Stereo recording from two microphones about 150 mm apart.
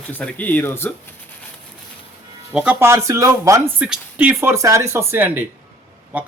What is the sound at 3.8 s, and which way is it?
Speech, 10° right (ahead or behind).